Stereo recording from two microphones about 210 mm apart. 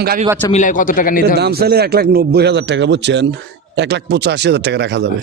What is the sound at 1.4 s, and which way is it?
A man's voice, 50° right (ahead or behind).